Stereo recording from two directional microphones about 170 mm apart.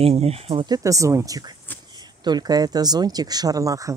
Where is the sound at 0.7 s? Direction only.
20° right (ahead or behind).